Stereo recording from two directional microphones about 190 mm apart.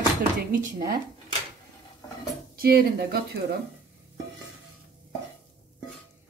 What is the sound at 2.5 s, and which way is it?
Speech, 55° right (ahead or behind).